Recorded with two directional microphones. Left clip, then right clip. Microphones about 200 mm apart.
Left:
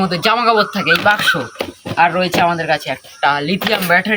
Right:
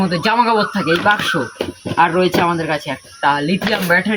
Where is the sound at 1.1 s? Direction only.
35° left (ahead or behind).